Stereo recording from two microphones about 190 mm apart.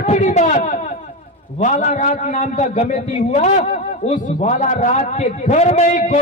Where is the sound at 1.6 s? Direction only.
40° left (ahead or behind).